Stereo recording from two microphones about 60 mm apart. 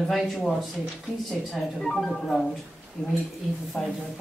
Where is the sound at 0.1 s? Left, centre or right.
Centre.